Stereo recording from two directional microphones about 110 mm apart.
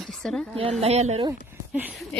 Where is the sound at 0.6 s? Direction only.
75° right (ahead or behind).